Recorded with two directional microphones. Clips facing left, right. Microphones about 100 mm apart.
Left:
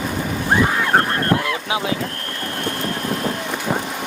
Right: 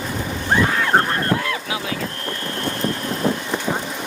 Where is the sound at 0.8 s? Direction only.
Centre (ahead or behind).